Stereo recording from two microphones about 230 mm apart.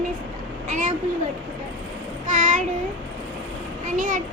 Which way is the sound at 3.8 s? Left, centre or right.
Right.